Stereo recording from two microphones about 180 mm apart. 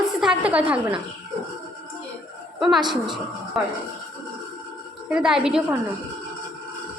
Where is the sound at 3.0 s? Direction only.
25° right (ahead or behind).